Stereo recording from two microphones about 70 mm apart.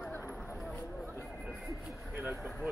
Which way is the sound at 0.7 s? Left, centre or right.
Left.